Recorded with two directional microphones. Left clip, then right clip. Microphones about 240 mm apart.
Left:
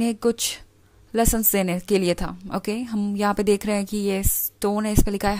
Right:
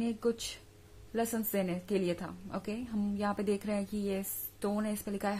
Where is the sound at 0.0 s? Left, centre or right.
Left.